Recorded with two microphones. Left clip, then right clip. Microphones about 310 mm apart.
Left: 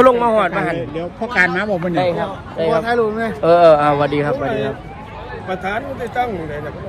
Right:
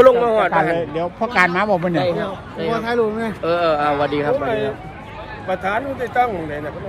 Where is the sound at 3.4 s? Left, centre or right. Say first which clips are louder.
Left 8 dB; centre.